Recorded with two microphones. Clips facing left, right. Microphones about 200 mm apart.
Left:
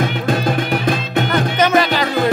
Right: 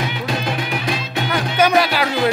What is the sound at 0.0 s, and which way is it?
Music, 50° left (ahead or behind).